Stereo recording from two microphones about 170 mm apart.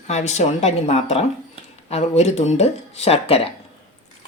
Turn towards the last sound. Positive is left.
turn(degrees=35)  # may be behind; listen again after turning